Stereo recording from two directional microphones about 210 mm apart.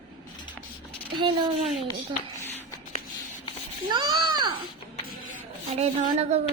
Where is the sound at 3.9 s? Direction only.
20° right (ahead or behind).